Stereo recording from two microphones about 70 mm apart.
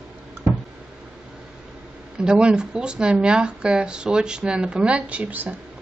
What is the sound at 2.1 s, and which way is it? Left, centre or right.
A woman's voice, centre.